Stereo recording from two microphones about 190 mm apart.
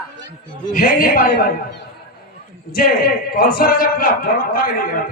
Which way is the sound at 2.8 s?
50° left (ahead or behind).